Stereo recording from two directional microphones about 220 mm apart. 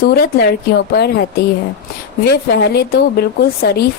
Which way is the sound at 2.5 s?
50° left (ahead or behind).